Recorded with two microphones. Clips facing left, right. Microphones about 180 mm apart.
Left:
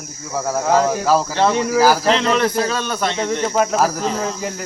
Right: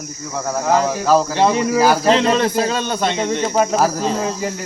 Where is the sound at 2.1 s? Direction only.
25° right (ahead or behind).